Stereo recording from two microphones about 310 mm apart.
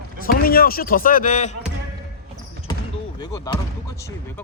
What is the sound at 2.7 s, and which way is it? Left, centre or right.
Basketball bounce, centre.